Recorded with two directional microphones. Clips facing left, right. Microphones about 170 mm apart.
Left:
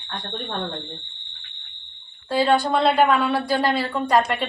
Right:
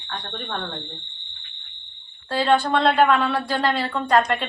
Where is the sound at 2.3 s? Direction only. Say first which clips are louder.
Left 1 dB; 10° left (ahead or behind).